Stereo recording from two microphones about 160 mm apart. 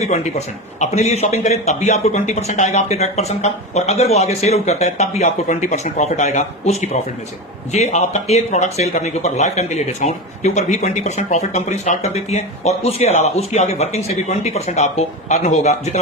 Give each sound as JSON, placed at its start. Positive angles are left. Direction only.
{"t": 0.0, "sound": "speech", "side_deg": 45}